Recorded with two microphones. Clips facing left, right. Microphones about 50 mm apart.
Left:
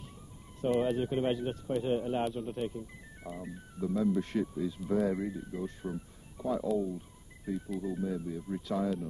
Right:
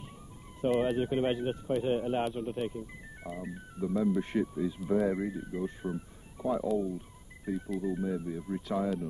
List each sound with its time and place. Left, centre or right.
0.6 s speech: centre